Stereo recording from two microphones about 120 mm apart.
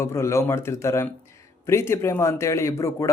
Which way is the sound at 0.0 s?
25° left (ahead or behind).